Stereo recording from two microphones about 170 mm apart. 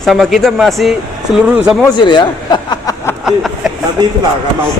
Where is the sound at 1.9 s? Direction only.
25° left (ahead or behind).